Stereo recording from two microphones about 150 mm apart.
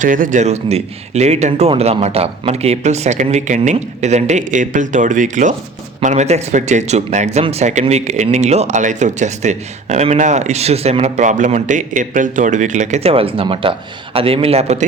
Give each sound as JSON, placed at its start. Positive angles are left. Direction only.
{"t": 0.0, "sound": "speech", "side_deg": -60}